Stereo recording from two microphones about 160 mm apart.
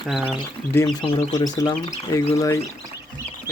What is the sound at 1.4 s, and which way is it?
Speech, 20° left (ahead or behind).